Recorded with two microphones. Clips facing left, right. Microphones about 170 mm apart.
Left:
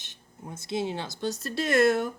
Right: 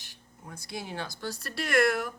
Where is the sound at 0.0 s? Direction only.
20° left (ahead or behind).